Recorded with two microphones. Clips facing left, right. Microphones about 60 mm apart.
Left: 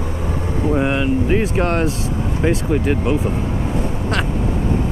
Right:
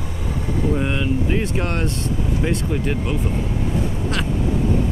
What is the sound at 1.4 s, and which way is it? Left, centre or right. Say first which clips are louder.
Speech: left 5 dB; centre.